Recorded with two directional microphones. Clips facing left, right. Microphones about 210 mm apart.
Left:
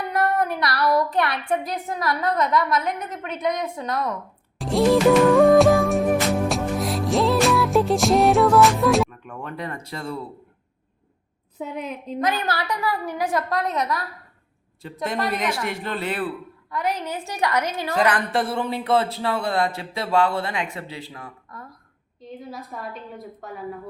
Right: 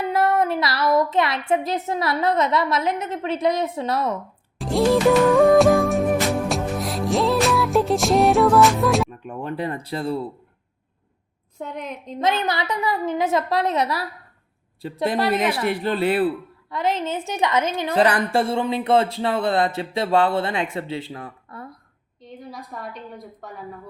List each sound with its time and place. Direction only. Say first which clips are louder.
0.0 s a sound: right 3 dB; 25° right (ahead or behind)
4.5 s music: even; centre (ahead or behind)
9.0 s speech: right 5 dB; 30° right (ahead or behind)
11.5 s a woman's voice: left 1 dB; 5° left (ahead or behind)
12.2 s a sound: right 3 dB; 20° right (ahead or behind)
14.8 s speech: right 4 dB; 35° right (ahead or behind)
15.3 s a woman's voice: right 4 dB; 5° right (ahead or behind)
15.7 s a sound: right 7 dB; 35° right (ahead or behind)
22.2 s a woman's voice: left 1 dB; centre (ahead or behind)